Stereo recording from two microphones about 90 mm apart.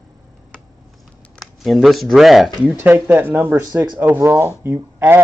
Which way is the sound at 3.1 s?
25° right (ahead or behind).